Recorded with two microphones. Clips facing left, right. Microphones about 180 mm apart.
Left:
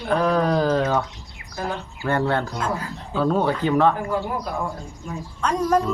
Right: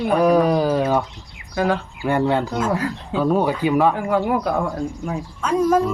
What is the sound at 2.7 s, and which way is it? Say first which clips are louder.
Speech: right 7 dB; 75° right (ahead or behind).